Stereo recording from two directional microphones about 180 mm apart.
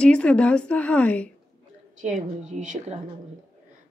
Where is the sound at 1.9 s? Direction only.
40° right (ahead or behind).